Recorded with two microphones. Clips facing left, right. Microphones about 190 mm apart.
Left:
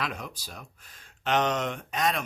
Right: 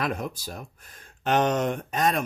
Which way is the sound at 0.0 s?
50° right (ahead or behind).